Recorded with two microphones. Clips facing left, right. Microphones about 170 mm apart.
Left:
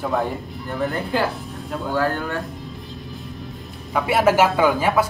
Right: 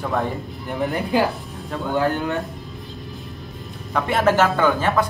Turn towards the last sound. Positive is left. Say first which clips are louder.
# left 1 dB
turn(degrees=10)  # may be behind; listen again after turning